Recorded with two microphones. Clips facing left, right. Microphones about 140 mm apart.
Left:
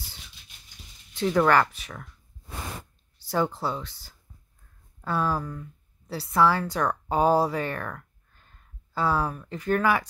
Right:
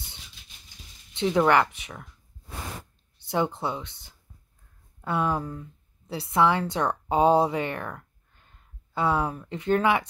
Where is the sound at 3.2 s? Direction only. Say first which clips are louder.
Even; 20° right (ahead or behind).